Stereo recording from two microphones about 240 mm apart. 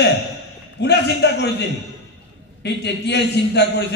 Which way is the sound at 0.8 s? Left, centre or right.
Left.